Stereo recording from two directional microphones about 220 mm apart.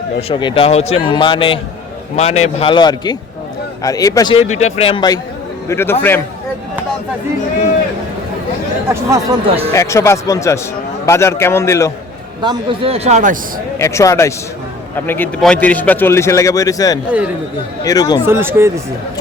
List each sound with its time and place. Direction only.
0.2 s a man's voice: 25° left (ahead or behind)
4.4 s a man's voice: 30° left (ahead or behind); by 6.2 s 10° left (ahead or behind)
8.9 s speech: 15° right (ahead or behind)
9.7 s a man's voice: 15° left (ahead or behind)
12.4 s speech: 20° right (ahead or behind)
13.7 s a man's voice: 10° left (ahead or behind)
18.3 s speech: 10° right (ahead or behind)